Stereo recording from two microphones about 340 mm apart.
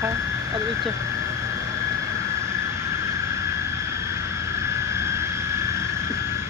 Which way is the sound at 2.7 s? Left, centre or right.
Centre.